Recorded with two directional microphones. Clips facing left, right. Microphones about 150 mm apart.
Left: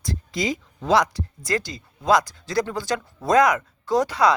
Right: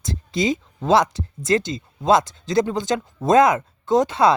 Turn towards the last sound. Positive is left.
turn(degrees=-25)  # may be behind; listen again after turning